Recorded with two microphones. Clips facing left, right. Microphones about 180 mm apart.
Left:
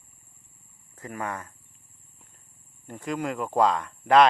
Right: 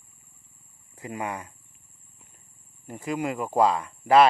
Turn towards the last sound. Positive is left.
turn(degrees=-5)  # may be behind; listen again after turning